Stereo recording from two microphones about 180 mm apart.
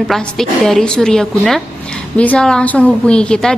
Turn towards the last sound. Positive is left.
turn(degrees=5)  # may be behind; listen again after turning